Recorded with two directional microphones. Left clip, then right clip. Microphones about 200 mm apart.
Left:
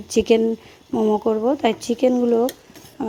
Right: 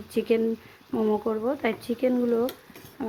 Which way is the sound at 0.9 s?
15° left (ahead or behind).